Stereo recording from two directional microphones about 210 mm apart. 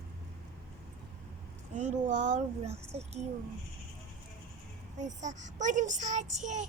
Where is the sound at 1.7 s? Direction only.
35° right (ahead or behind).